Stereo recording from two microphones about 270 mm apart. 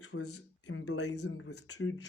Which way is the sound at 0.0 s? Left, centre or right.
Left.